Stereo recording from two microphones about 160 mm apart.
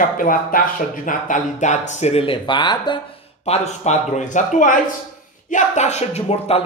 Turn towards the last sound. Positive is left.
turn(degrees=40)  # may be behind; listen again after turning